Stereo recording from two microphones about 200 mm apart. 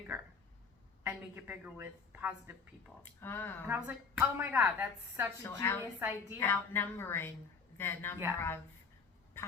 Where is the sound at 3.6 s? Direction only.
10° right (ahead or behind).